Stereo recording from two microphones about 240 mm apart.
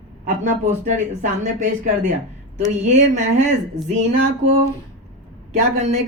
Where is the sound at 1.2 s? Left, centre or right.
Right.